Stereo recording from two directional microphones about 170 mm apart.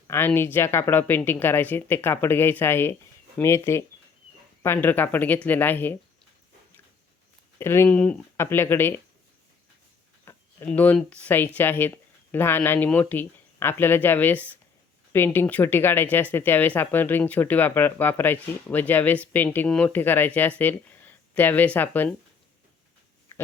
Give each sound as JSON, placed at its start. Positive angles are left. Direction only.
{"t": 0.1, "sound": "speech", "side_deg": 15}
{"t": 7.6, "sound": "speech", "side_deg": 15}
{"t": 10.2, "sound": "speech", "side_deg": 10}